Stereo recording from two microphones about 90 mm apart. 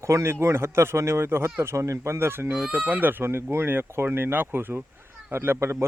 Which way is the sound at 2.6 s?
15° right (ahead or behind).